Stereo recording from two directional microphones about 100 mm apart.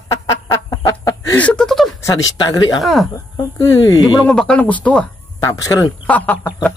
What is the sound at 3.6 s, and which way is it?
Speech, 40° left (ahead or behind).